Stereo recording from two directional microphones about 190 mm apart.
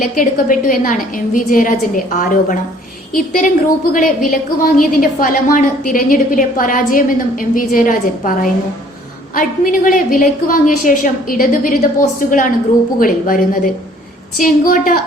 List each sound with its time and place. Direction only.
0.0 s a woman's voice: 45° left (ahead or behind)